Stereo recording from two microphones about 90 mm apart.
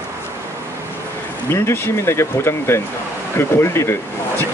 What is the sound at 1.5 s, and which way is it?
Speech, 30° left (ahead or behind).